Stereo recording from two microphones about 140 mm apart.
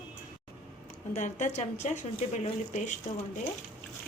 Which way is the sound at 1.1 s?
55° left (ahead or behind).